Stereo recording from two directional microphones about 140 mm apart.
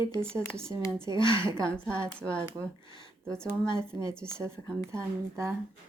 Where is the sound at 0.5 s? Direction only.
20° right (ahead or behind).